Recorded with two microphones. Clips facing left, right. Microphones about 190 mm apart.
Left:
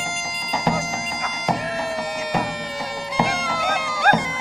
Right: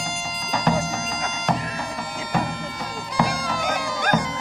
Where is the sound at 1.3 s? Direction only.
10° left (ahead or behind).